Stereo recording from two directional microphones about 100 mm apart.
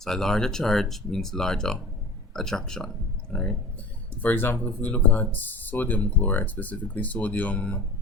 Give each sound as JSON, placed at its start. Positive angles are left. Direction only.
{"t": 0.0, "sound": "speech", "side_deg": 5}